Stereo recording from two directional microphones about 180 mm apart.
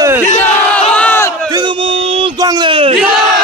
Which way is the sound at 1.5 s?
30° right (ahead or behind).